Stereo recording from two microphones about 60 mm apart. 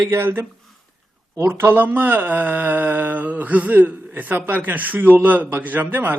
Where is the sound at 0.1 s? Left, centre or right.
Right.